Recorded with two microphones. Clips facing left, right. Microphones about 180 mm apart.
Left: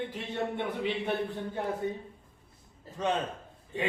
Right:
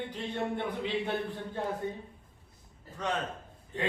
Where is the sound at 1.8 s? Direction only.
15° left (ahead or behind).